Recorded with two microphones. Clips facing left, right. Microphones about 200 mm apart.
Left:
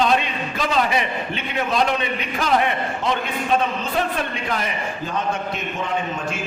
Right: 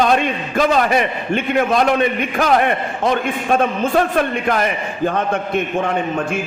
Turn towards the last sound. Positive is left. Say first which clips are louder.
# right 6 dB
turn(degrees=-55)  # may be behind; listen again after turning